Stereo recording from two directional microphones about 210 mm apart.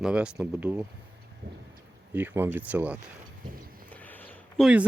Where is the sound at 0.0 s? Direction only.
5° right (ahead or behind).